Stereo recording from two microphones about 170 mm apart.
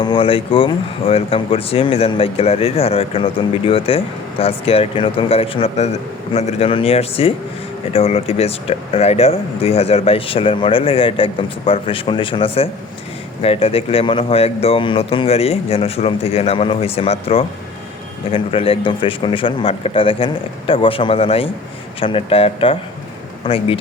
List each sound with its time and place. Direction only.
0.0 s speech: 30° left (ahead or behind)